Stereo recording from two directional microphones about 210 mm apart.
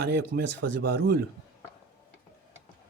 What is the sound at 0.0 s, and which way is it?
Speech, 50° right (ahead or behind).